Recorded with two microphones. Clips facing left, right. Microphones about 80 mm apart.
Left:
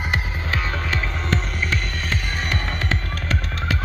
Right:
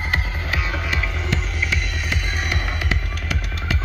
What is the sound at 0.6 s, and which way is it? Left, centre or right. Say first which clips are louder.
Music: even; centre.